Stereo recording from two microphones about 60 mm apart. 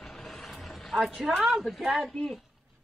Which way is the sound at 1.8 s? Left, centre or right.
Centre.